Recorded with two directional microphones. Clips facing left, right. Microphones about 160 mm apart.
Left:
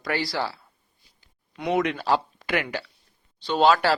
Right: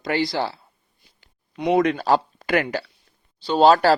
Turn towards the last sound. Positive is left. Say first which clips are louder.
# right 5 dB
turn(degrees=-40)  # may be behind; listen again after turning